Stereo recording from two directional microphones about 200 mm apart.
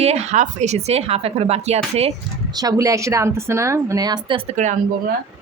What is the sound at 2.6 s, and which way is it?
A woman's voice, 15° right (ahead or behind).